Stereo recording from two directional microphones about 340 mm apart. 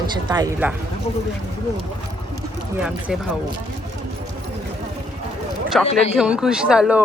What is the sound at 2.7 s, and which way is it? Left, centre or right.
Speech, centre.